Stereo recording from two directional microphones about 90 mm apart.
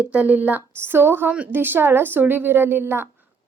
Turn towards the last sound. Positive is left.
turn(degrees=-25)  # may be behind; listen again after turning